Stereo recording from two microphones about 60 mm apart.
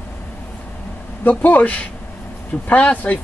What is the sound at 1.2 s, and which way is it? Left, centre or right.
Speech, left.